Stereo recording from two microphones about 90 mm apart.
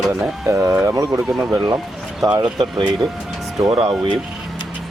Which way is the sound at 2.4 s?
60° right (ahead or behind).